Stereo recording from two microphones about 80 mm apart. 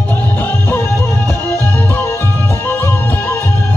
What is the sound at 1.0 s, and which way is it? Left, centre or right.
Music, right.